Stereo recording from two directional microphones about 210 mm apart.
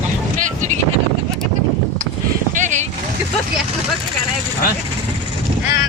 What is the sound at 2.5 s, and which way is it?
Vehicle, 35° right (ahead or behind).